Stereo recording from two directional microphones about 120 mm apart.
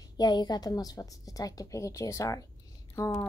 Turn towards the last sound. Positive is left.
turn(degrees=25)  # may be behind; listen again after turning